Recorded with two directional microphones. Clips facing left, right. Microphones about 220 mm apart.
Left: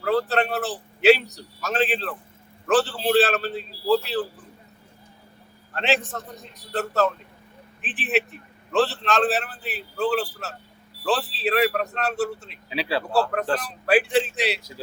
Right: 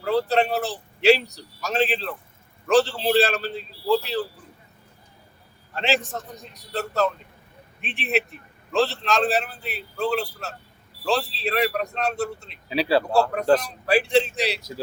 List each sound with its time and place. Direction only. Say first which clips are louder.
0.0 s a man's voice: right 1 dB; centre (ahead or behind)
5.7 s a man's voice: even; centre (ahead or behind)
12.7 s speech: right 6 dB; 40° right (ahead or behind)
13.6 s a man's voice: left 1 dB; 5° left (ahead or behind)